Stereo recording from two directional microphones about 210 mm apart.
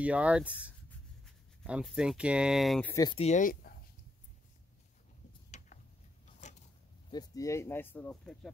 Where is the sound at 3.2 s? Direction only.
35° left (ahead or behind).